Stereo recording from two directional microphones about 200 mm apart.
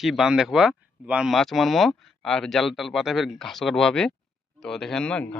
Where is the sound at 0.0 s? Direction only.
Centre (ahead or behind).